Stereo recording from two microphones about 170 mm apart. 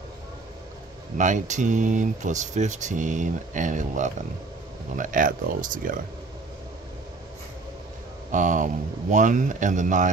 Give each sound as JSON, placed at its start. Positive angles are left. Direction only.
{"t": 1.1, "sound": "speech", "side_deg": -45}
{"t": 8.3, "sound": "speech", "side_deg": -50}